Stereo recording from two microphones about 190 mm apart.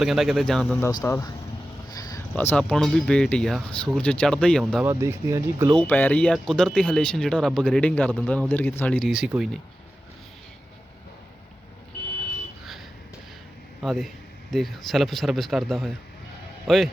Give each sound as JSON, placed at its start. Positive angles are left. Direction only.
{"t": 0.0, "sound": "speech", "side_deg": 0}
{"t": 1.0, "sound": "speech", "side_deg": 15}
{"t": 1.9, "sound": "a sound", "side_deg": 20}
{"t": 2.3, "sound": "speech", "side_deg": 10}
{"t": 4.9, "sound": "speech", "side_deg": -15}
{"t": 5.7, "sound": "speech", "side_deg": 10}
{"t": 13.8, "sound": "speech", "side_deg": 0}